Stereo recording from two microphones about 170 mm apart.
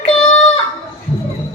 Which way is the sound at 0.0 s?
35° left (ahead or behind).